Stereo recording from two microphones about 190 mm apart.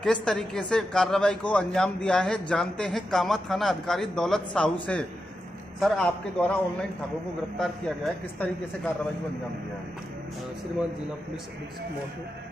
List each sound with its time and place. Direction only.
0.0 s speech: 5° left (ahead or behind)
5.8 s speech: 5° left (ahead or behind)